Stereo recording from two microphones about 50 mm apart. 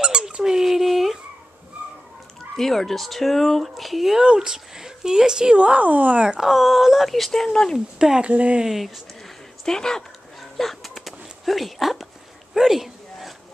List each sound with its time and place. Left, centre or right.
0.0 s dog: centre
2.5 s speech: centre
4.2 s speech: centre; by 6.2 s right
6.2 s speech: centre
7.4 s speech: centre
8.0 s speech: centre
8.3 s speech: right
8.6 s speech: centre
9.7 s speech: centre
10.6 s dog: centre
12.5 s a sound: centre